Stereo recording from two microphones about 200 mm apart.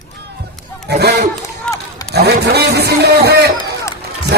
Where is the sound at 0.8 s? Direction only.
55° right (ahead or behind).